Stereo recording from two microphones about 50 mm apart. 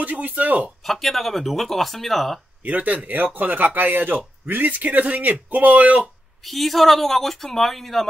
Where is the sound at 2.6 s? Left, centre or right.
Right.